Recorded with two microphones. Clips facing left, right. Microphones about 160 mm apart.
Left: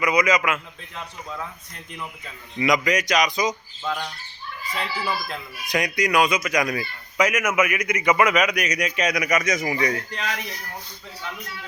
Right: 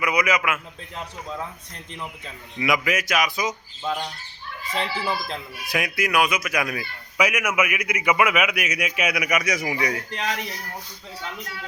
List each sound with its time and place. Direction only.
0.0 s a man's voice: 5° right (ahead or behind)
2.6 s speech: 5° right (ahead or behind)
3.8 s speech: 20° right (ahead or behind)
5.6 s a man's voice: 5° right (ahead or behind)
10.1 s speech: 25° right (ahead or behind)